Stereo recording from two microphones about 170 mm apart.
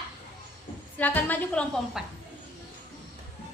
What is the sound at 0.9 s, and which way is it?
A woman's voice, 10° left (ahead or behind).